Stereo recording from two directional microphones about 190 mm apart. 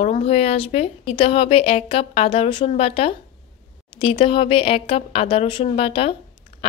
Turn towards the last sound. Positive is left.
turn(degrees=30)  # may be behind; listen again after turning